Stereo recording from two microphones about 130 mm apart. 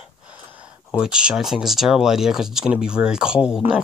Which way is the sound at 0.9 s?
5° right (ahead or behind).